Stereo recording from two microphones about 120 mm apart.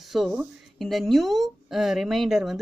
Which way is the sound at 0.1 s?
5° right (ahead or behind).